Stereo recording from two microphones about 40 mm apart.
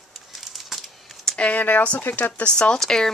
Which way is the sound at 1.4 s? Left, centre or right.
Left.